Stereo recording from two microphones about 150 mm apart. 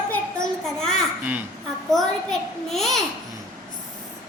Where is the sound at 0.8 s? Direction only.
5° left (ahead or behind).